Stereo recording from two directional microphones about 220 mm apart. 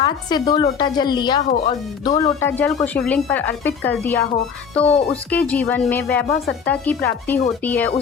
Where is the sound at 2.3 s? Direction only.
10° left (ahead or behind).